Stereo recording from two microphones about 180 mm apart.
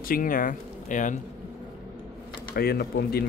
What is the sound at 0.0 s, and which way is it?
Speech, 50° left (ahead or behind).